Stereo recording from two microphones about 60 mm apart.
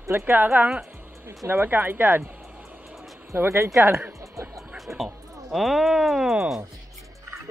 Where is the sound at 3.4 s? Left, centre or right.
Right.